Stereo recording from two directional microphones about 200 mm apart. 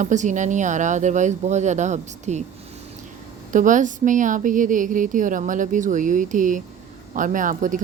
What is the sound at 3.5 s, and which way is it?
Speech, 40° right (ahead or behind).